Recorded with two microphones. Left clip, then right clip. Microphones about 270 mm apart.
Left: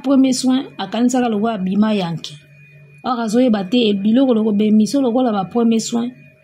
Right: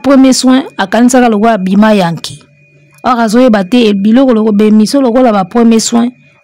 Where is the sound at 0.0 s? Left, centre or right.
Right.